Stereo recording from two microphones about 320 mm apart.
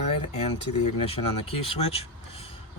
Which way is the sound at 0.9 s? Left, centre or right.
Centre.